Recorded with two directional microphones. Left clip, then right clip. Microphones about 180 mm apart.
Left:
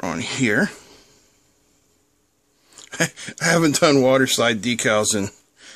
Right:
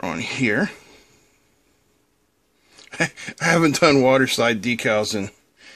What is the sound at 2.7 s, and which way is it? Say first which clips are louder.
Speech: even; 15° left (ahead or behind).